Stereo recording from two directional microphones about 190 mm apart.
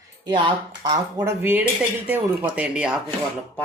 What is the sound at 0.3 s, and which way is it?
Speech, 25° right (ahead or behind).